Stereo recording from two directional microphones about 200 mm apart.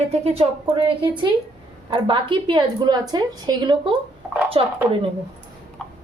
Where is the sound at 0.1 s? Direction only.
30° right (ahead or behind).